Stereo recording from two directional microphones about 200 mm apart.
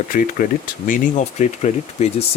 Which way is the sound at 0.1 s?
40° left (ahead or behind).